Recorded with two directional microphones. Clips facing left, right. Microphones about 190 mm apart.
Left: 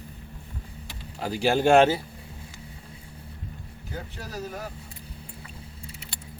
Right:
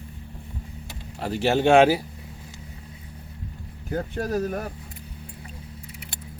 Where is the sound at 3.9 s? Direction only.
50° right (ahead or behind).